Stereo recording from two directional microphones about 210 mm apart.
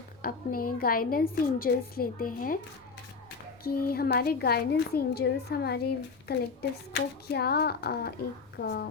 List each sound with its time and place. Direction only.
0.2 s a woman's voice: 45° left (ahead or behind)
3.6 s a woman's voice: 45° left (ahead or behind)